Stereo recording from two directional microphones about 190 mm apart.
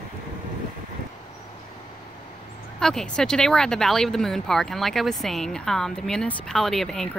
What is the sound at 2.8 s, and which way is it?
Speech, 5° left (ahead or behind).